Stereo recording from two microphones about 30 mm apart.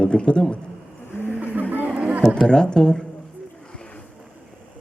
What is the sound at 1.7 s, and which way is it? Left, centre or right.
Music, right.